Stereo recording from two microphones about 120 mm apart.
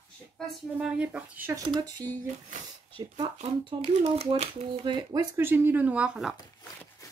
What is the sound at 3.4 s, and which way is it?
Speech, 60° right (ahead or behind).